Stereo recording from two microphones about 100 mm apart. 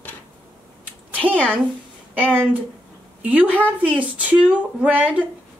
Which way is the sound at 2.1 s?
20° right (ahead or behind).